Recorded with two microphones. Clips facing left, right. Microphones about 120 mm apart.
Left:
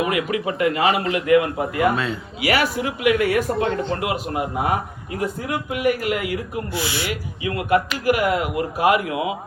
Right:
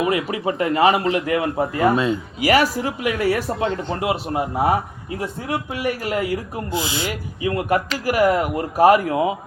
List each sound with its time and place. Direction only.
0.1 s a man's voice: 30° right (ahead or behind)
7.4 s a man's voice: 35° right (ahead or behind)